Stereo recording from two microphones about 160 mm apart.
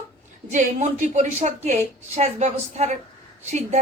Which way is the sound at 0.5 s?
50° right (ahead or behind).